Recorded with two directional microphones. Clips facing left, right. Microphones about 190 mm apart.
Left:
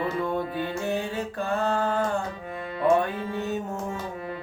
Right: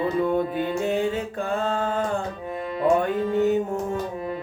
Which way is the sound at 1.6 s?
20° right (ahead or behind).